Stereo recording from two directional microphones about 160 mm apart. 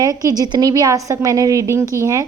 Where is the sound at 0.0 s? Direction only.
20° right (ahead or behind).